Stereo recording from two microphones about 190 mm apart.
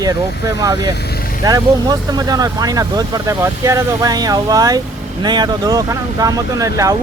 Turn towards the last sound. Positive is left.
turn(degrees=-15)  # may be behind; listen again after turning